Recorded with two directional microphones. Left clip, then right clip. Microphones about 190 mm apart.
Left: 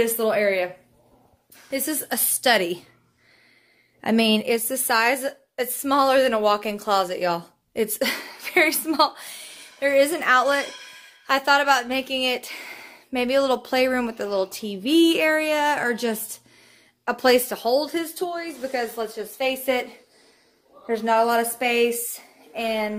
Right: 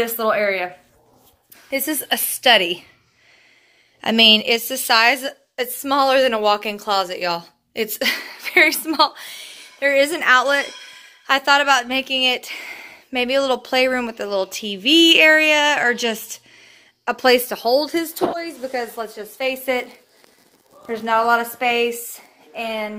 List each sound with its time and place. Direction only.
0.2 s a woman's voice: 5° left (ahead or behind)
1.7 s a woman's voice: 15° right (ahead or behind); by 2.9 s centre (ahead or behind)
4.0 s a woman's voice: centre (ahead or behind); by 17.6 s 15° right (ahead or behind)
17.6 s speech: 40° right (ahead or behind)
17.9 s speech: 55° right (ahead or behind)
18.6 s speech: 25° right (ahead or behind)
18.9 s a woman's voice: 5° right (ahead or behind)
20.8 s a woman's voice: 5° left (ahead or behind)